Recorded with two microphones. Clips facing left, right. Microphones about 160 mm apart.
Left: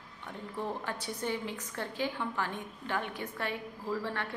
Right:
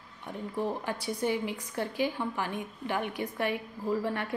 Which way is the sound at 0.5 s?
10° right (ahead or behind).